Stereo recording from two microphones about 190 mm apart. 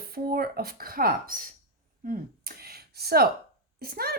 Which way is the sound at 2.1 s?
50° right (ahead or behind).